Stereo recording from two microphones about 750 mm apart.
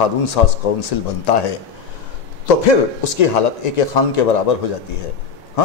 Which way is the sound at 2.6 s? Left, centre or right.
Left.